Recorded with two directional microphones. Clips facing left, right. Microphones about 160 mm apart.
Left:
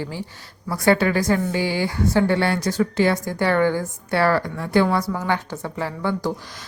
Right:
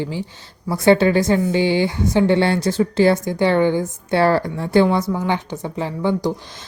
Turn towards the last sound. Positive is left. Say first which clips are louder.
# right 4 dB
turn(degrees=-20)  # may be behind; listen again after turning